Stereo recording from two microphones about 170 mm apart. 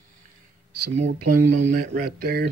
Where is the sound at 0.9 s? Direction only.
40° right (ahead or behind); by 2.5 s 65° right (ahead or behind).